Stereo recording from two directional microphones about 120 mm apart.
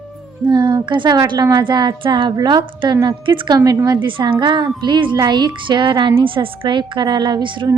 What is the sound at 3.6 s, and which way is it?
Speech, 25° right (ahead or behind).